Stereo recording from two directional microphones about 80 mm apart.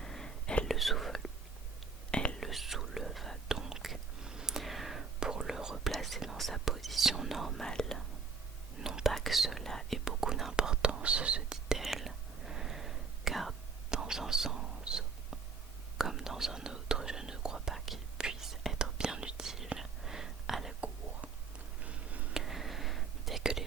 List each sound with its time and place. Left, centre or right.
0.0 s whispering: centre
2.4 s whispering: centre
8.8 s whispering: centre
21.8 s a sound: centre
22.4 s whispering: centre